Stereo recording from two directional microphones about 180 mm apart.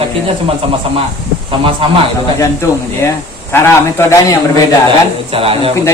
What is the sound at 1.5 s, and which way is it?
Speech, 30° right (ahead or behind).